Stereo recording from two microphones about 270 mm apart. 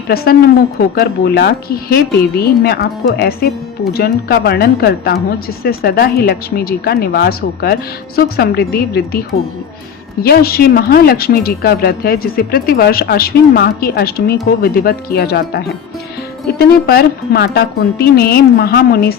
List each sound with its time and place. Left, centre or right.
0.1 s a woman's voice: left
10.2 s a woman's voice: left